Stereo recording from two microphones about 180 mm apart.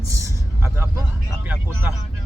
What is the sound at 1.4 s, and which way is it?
Speech, 10° right (ahead or behind).